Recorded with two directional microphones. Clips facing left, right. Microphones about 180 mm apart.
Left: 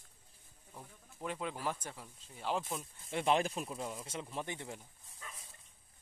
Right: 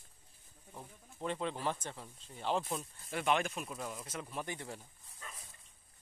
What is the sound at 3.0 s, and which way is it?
Speech, 25° left (ahead or behind).